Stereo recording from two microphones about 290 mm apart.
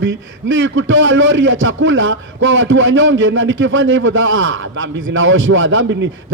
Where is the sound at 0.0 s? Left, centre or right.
Right.